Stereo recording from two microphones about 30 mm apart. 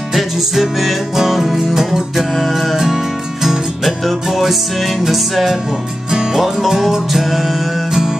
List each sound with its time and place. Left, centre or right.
0.1 s music: centre
2.3 s music: centre
2.9 s music: centre
3.8 s music: centre
6.0 s music: right
6.3 s music: centre